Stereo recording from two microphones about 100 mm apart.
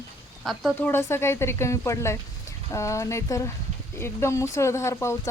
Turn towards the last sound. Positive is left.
turn(degrees=30)  # may be behind; listen again after turning